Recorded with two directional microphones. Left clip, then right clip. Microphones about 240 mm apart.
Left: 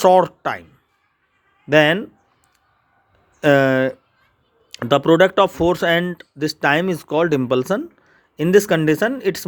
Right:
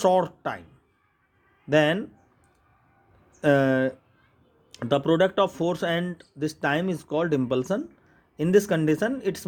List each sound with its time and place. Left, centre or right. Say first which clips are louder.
0.0 s speech: left 8 dB; left
1.7 s speech: left 7 dB; left
3.4 s speech: left 7 dB; left